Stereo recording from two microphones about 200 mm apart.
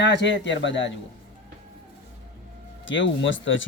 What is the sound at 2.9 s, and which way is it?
Speech, 70° left (ahead or behind).